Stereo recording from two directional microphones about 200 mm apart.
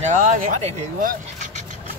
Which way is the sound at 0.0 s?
40° right (ahead or behind).